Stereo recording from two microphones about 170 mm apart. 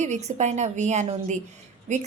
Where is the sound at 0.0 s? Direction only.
40° right (ahead or behind).